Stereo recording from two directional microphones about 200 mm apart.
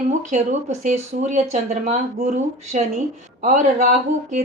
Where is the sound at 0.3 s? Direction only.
35° right (ahead or behind).